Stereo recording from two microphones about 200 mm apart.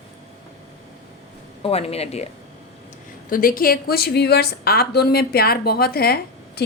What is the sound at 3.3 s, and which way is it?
A woman's voice, 45° left (ahead or behind).